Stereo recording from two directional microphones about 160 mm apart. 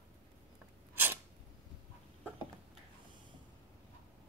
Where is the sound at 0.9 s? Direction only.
10° right (ahead or behind).